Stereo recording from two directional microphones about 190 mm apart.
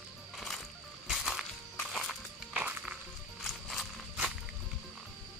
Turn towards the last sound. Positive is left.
turn(degrees=0)  # may be behind; listen again after turning